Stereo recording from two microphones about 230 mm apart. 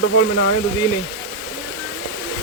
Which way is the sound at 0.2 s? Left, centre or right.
Left.